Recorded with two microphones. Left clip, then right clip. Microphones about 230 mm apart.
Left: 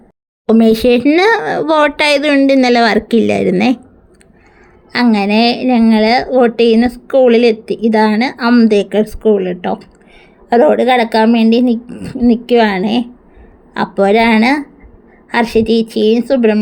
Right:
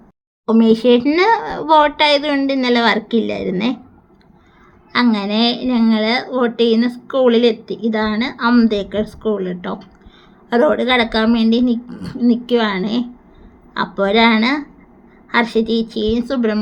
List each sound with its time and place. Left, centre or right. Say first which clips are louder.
0.4 s a woman's voice: left 3 dB; left
4.9 s a woman's voice: left 4 dB; left